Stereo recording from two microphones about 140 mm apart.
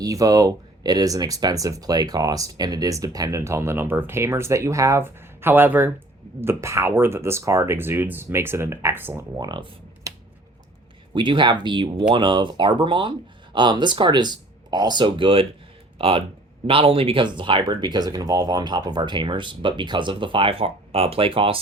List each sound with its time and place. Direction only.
0.0 s speech: 25° right (ahead or behind)
11.1 s speech: 35° right (ahead or behind)